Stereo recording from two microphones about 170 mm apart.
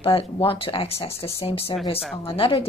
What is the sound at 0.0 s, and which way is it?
A woman's voice, 35° left (ahead or behind).